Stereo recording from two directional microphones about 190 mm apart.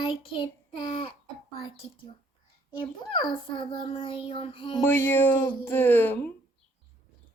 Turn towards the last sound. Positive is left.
turn(degrees=10)  # may be behind; listen again after turning